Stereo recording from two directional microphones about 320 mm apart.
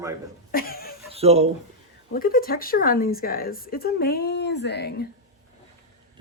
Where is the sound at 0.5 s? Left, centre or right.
Left.